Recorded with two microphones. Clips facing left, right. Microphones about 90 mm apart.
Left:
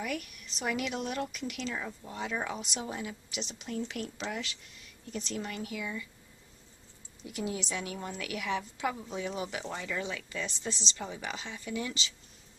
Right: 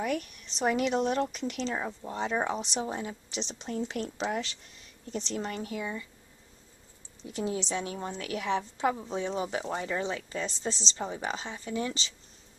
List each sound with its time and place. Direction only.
0.0 s speech: 35° right (ahead or behind)
7.2 s speech: 30° right (ahead or behind)